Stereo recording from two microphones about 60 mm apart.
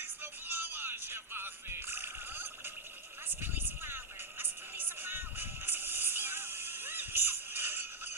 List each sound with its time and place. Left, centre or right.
0.0 s music: right